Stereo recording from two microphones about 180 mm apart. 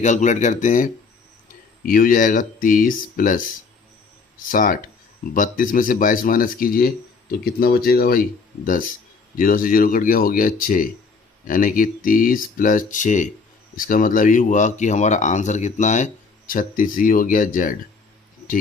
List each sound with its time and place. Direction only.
0.0 s speech: 40° left (ahead or behind)
4.5 s speech: 50° left (ahead or behind)
9.4 s speech: 50° left (ahead or behind)